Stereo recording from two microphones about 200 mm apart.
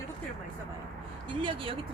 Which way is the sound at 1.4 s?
25° right (ahead or behind).